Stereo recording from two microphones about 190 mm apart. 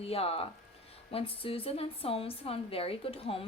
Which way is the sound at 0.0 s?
30° left (ahead or behind).